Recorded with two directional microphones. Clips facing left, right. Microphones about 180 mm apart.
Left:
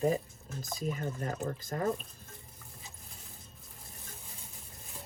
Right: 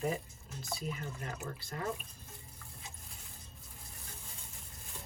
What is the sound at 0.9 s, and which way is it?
Speech, 40° left (ahead or behind).